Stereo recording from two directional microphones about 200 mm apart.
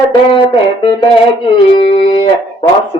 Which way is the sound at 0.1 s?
25° left (ahead or behind).